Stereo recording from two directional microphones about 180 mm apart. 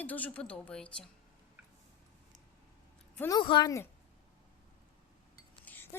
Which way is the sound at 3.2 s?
25° left (ahead or behind).